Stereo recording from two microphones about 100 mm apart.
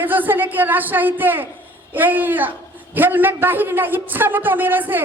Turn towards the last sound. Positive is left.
turn(degrees=-20)  # may be behind; listen again after turning